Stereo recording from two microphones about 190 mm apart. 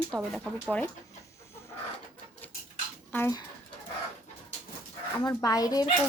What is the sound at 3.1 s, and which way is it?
Speech, 10° left (ahead or behind).